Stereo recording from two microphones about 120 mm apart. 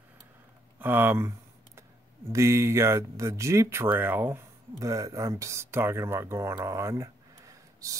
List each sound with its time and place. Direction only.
0.7 s speech: 15° right (ahead or behind)
2.3 s speech: 25° right (ahead or behind)
4.7 s speech: 30° right (ahead or behind)